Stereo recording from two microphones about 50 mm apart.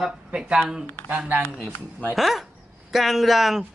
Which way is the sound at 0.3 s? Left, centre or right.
Centre.